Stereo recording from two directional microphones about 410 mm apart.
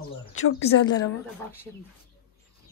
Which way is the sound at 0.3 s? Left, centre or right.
Left.